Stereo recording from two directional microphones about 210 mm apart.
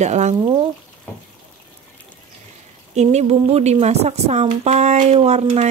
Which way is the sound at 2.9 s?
30° right (ahead or behind).